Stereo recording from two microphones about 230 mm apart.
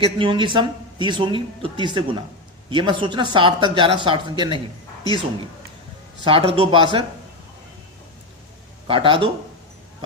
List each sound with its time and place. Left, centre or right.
0.0 s speech: right
6.2 s speech: right
8.9 s speech: right